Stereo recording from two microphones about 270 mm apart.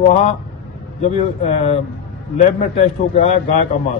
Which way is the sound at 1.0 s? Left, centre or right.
Left.